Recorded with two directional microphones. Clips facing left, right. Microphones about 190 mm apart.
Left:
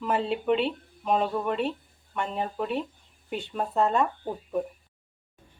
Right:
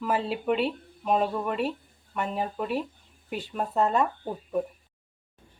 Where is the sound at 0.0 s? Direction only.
Centre (ahead or behind).